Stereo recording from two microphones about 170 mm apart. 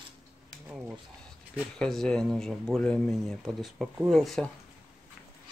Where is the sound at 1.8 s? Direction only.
5° left (ahead or behind).